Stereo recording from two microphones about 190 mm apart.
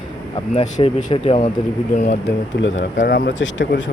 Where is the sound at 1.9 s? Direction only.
45° left (ahead or behind).